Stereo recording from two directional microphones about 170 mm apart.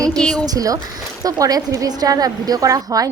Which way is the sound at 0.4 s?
20° right (ahead or behind).